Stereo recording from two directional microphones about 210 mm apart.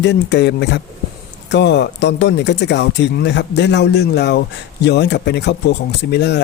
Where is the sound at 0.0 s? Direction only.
55° left (ahead or behind).